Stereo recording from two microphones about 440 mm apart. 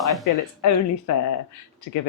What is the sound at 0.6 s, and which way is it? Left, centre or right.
Speech, left.